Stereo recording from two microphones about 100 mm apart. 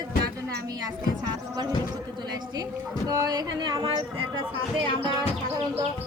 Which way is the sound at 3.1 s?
40° right (ahead or behind).